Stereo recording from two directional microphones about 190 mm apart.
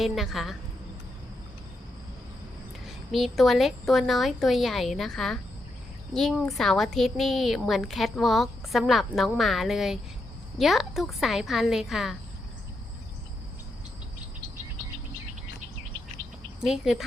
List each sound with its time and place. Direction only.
0.0 s a woman's voice: centre (ahead or behind)
2.8 s a woman's voice: centre (ahead or behind)
16.2 s bird: 45° left (ahead or behind)
16.6 s speech: centre (ahead or behind)